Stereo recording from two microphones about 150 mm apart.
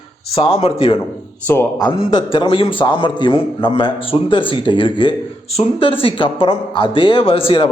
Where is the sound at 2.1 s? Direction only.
35° left (ahead or behind).